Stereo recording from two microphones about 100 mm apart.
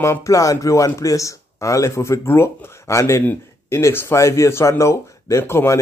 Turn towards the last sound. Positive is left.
turn(degrees=25)  # may be behind; listen again after turning